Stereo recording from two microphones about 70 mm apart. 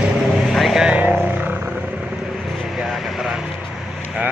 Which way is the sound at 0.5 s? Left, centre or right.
Centre.